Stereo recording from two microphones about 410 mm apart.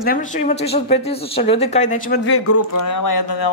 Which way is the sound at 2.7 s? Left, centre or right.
Left.